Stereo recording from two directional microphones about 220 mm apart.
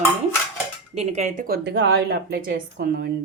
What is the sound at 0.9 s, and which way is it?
Speech, 30° right (ahead or behind).